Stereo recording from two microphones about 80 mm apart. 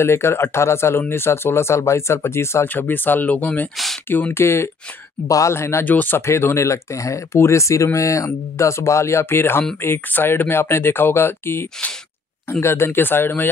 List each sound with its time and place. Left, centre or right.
0.0 s speech: left
3.7 s a sound: centre
4.1 s speech: left
5.9 s speech: left
6.2 s speech: left